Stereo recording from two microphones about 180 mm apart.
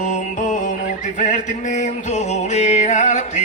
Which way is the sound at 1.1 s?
45° left (ahead or behind).